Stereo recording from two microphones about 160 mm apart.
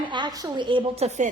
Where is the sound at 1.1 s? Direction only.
50° right (ahead or behind).